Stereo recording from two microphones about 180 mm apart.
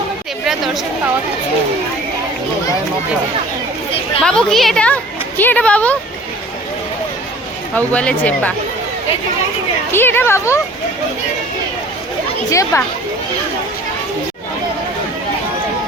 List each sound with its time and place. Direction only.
0.4 s a woman's voice: centre (ahead or behind)
4.2 s a woman's voice: 5° left (ahead or behind)
7.8 s speech: 10° left (ahead or behind)
9.9 s speech: 10° left (ahead or behind)
12.5 s speech: 15° left (ahead or behind)